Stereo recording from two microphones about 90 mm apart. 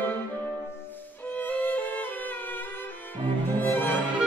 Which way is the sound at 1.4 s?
20° left (ahead or behind).